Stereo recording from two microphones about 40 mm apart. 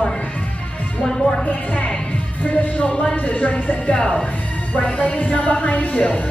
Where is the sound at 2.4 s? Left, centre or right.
Left.